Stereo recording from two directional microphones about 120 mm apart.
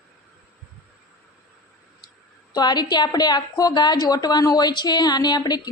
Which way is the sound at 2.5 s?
35° left (ahead or behind).